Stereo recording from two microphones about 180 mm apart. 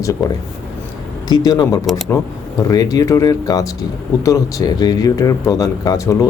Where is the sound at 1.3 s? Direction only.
20° left (ahead or behind).